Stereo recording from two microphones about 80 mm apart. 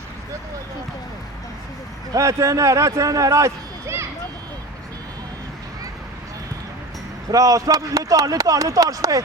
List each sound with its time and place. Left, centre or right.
2.1 s speech: right
7.3 s speech: right